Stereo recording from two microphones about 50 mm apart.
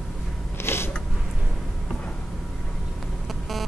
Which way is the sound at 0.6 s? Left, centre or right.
Left.